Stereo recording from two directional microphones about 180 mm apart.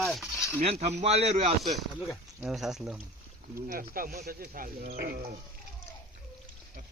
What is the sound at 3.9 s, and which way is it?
Speech, 55° right (ahead or behind).